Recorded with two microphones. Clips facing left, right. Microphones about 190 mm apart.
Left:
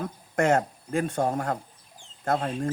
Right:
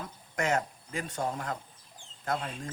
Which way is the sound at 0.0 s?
50° left (ahead or behind).